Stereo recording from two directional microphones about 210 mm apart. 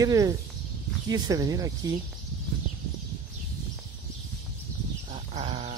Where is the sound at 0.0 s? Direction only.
15° right (ahead or behind).